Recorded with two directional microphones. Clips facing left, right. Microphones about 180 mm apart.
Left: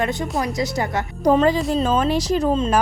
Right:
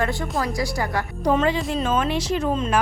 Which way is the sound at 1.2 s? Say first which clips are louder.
Left 5 dB; 40° left (ahead or behind).